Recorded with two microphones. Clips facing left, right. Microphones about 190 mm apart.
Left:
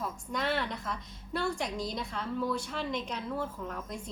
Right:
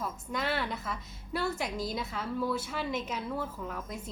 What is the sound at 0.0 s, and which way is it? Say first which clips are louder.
A woman's voice: even; centre (ahead or behind).